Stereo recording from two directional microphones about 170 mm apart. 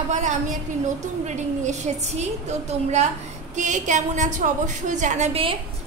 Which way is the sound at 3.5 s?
45° right (ahead or behind).